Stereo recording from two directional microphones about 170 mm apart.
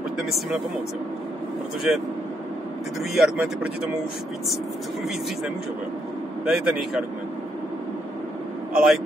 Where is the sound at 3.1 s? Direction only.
5° right (ahead or behind).